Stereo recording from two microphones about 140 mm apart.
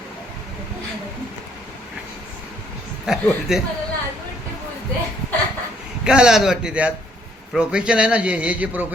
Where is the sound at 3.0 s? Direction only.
Centre (ahead or behind).